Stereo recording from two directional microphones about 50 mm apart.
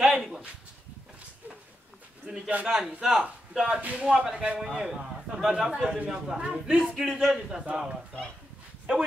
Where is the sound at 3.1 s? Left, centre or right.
Centre.